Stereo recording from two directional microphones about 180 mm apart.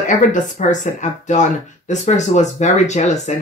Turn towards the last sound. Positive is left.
turn(degrees=40)  # may be behind; listen again after turning